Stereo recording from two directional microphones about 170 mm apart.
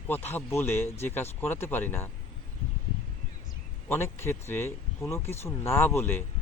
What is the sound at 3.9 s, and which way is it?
Speech, 15° left (ahead or behind).